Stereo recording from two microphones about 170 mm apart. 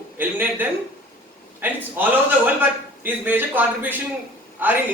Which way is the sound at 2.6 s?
10° right (ahead or behind).